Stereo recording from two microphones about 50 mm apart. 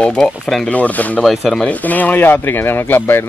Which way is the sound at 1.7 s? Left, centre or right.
Left.